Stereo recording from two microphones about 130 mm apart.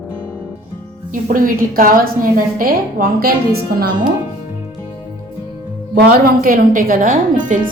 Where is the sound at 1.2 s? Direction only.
90° right.